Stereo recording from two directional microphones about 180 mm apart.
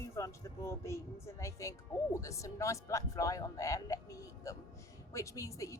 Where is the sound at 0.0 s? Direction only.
15° left (ahead or behind).